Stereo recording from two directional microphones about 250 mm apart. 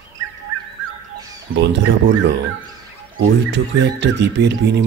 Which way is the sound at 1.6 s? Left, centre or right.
Right.